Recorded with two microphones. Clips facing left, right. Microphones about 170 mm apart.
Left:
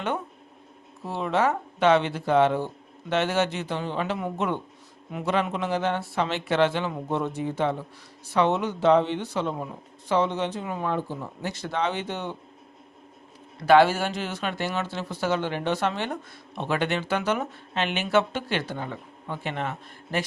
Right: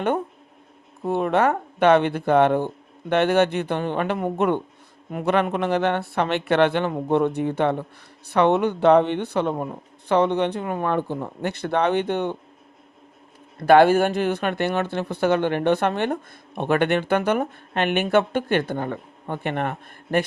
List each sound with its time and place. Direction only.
1.0 s speech: 55° right (ahead or behind)
13.6 s speech: 55° right (ahead or behind)